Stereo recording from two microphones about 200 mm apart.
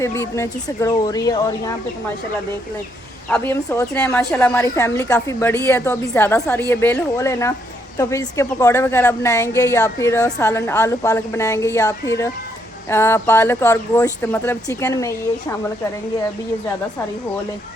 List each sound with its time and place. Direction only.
0.0 s a woman's voice: 15° left (ahead or behind)
3.2 s a woman's voice: 10° left (ahead or behind)